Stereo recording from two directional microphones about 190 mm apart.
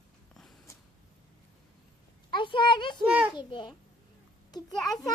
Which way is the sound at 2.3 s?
25° left (ahead or behind).